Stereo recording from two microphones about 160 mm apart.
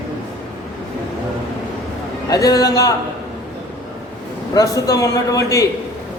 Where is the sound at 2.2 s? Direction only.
20° left (ahead or behind).